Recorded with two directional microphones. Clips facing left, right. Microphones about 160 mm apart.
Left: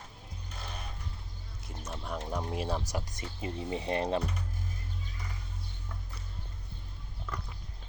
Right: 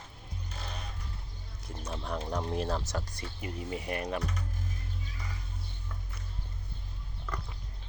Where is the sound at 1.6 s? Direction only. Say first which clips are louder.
Right 2 dB; centre (ahead or behind); by 4.2 s 25° left (ahead or behind).